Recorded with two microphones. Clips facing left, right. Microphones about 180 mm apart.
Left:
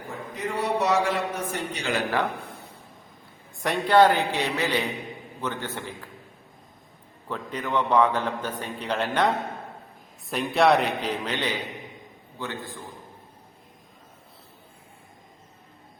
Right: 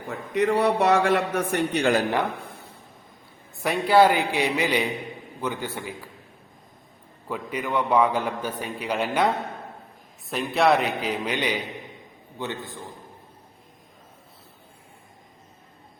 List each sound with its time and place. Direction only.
0.3 s a man's voice: 65° right (ahead or behind)
3.6 s a man's voice: 5° right (ahead or behind)
7.3 s a man's voice: 10° right (ahead or behind)